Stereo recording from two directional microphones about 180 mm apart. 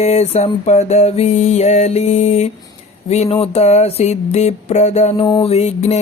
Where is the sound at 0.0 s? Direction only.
35° left (ahead or behind).